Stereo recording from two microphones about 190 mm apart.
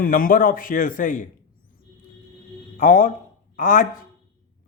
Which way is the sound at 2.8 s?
45° left (ahead or behind).